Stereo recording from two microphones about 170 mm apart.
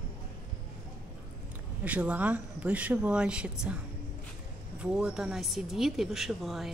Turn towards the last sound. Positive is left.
turn(degrees=0)  # may be behind; listen again after turning